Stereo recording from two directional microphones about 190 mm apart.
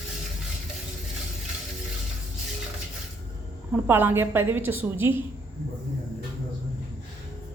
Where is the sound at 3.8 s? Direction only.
10° right (ahead or behind).